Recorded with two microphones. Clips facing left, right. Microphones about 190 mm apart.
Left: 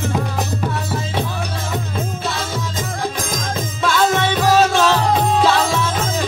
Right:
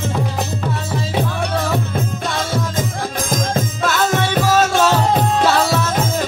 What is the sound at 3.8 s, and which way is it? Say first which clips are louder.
Music: left 3 dB; 45° right (ahead or behind).